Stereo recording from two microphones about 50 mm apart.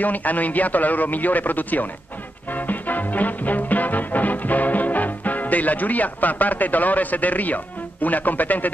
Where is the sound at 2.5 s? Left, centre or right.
Left.